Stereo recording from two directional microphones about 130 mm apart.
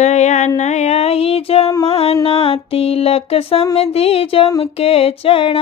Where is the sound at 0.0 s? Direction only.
60° left (ahead or behind).